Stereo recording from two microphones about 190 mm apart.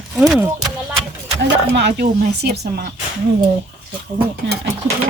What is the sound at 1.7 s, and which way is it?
Speech, 60° right (ahead or behind).